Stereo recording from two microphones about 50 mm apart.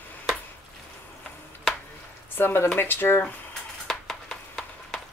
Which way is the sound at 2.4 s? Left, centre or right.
Left.